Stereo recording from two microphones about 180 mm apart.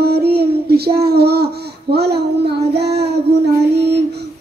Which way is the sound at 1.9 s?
65° right (ahead or behind).